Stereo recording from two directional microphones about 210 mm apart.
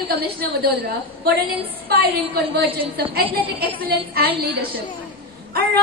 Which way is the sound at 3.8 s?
45° right (ahead or behind).